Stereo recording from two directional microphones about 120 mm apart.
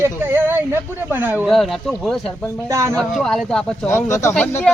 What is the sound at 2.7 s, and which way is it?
Speech, 25° right (ahead or behind).